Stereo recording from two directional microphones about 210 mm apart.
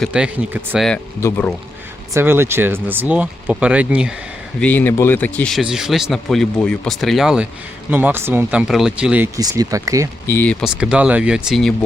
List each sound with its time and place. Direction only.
0.0 s speech: 5° right (ahead or behind)
0.9 s speech: 5° left (ahead or behind)
2.1 s speech: 10° right (ahead or behind)
4.6 s speech: 10° left (ahead or behind)
9.4 s speech: 15° right (ahead or behind)
10.2 s speech: 10° left (ahead or behind)